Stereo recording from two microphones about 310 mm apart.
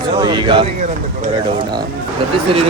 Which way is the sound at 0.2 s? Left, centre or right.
Centre.